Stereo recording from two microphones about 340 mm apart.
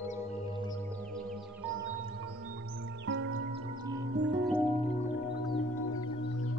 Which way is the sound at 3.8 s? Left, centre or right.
Centre.